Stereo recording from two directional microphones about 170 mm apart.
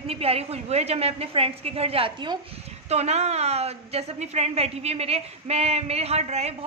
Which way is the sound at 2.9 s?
40° right (ahead or behind).